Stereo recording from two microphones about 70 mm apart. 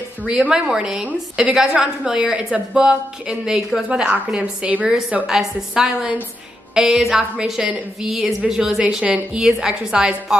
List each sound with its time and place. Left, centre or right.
0.3 s a woman's voice: centre
2.7 s a woman's voice: centre
5.2 s a woman's voice: centre
8.8 s a woman's voice: centre
9.4 s a woman's voice: centre